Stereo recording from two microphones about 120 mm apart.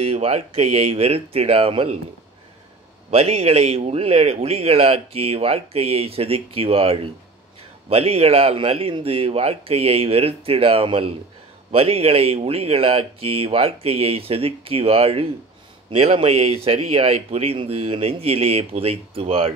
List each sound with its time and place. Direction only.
0.0 s speech: 60° right (ahead or behind)
3.1 s speech: 60° right (ahead or behind)